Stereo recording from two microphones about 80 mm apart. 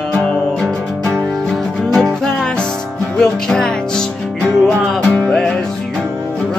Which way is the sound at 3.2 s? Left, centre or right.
Centre.